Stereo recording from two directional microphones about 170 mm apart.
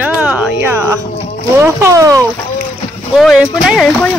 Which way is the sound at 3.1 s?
Centre (ahead or behind).